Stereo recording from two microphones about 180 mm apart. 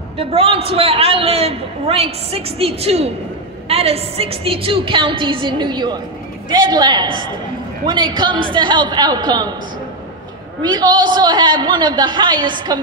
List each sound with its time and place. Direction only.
0.2 s a man's voice: 30° right (ahead or behind)
10.6 s a woman's voice: 25° right (ahead or behind)